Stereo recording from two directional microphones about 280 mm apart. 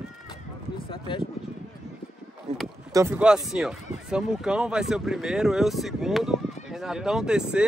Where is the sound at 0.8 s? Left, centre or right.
Centre.